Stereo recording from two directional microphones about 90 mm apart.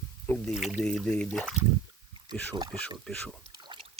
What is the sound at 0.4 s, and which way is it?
Speech, 5° right (ahead or behind).